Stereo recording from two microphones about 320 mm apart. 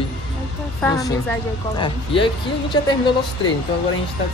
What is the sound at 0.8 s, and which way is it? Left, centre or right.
A woman's voice, centre.